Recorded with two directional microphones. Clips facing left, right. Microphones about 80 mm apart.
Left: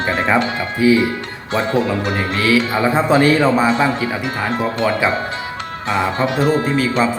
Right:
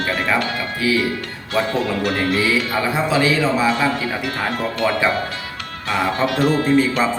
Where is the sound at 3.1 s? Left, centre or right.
Left.